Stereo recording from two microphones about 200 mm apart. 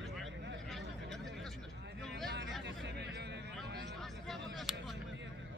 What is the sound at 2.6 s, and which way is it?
Hubbub, 60° right (ahead or behind).